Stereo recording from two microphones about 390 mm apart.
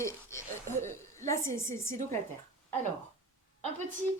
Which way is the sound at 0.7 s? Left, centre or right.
Centre.